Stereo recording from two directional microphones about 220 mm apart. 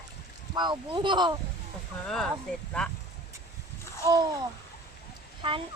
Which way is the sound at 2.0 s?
Centre (ahead or behind).